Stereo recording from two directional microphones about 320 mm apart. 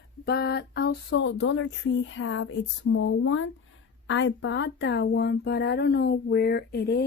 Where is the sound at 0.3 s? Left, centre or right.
Left.